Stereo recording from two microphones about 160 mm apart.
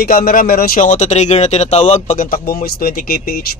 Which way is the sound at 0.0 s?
65° left (ahead or behind).